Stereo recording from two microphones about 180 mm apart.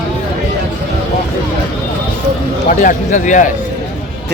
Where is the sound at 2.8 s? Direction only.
45° left (ahead or behind).